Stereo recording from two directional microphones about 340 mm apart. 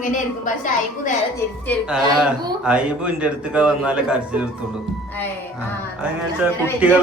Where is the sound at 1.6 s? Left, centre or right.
Centre.